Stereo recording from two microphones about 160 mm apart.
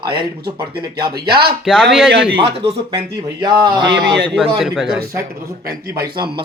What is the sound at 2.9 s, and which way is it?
Speech, 25° right (ahead or behind).